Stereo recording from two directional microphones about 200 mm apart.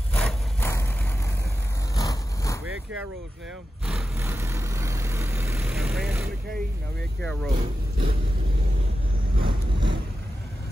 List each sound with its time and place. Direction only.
0.1 s vehicle: 5° left (ahead or behind)
2.0 s vehicle: 15° left (ahead or behind)
3.8 s vehicle: centre (ahead or behind)
4.2 s vehicle: 15° right (ahead or behind)
5.6 s vehicle: centre (ahead or behind)
7.2 s speech: 5° left (ahead or behind)
9.4 s vehicle: 25° right (ahead or behind)